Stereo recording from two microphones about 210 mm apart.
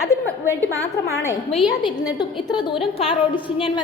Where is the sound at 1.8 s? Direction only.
20° left (ahead or behind).